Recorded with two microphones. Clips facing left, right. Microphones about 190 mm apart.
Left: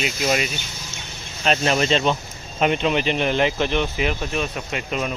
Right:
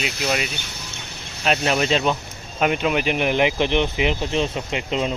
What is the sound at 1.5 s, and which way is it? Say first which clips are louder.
Speech: left 1 dB; centre (ahead or behind).